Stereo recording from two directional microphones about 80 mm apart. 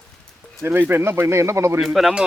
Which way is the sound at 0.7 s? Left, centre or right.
Right.